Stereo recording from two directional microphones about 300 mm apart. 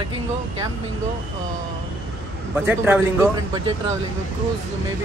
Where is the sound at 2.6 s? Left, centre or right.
Centre.